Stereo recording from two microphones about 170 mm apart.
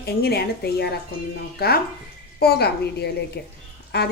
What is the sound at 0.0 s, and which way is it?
A woman's voice, 65° left (ahead or behind).